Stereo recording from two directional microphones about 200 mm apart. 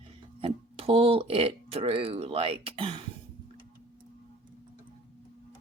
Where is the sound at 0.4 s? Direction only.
30° right (ahead or behind).